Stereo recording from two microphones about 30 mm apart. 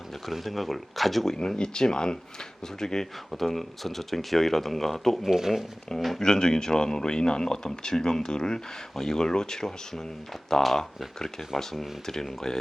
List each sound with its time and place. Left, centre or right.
0.3 s speech: centre
1.4 s speech: left; by 5.2 s centre
5.2 s speech: centre
6.1 s speech: left
10.8 s speech: centre